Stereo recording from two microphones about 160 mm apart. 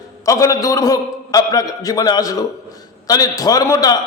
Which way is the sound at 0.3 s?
20° left (ahead or behind).